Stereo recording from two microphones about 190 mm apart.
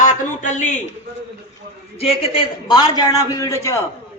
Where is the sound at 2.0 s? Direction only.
25° left (ahead or behind).